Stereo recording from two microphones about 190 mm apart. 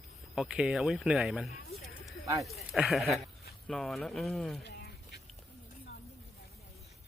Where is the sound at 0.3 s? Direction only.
5° right (ahead or behind).